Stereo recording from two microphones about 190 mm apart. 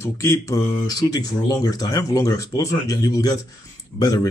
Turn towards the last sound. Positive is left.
turn(degrees=20)  # may be behind; listen again after turning